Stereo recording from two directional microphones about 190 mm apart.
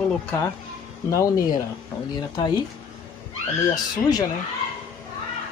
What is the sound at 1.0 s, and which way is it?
Speech, 15° left (ahead or behind).